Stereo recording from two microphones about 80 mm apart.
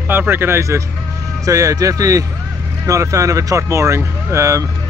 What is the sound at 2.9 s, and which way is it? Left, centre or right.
Speech, right.